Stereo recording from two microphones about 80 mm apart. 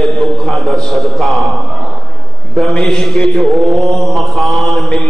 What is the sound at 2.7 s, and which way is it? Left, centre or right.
Mantra, centre.